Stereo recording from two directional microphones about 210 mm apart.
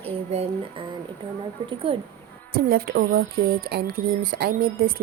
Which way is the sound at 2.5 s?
45° right (ahead or behind).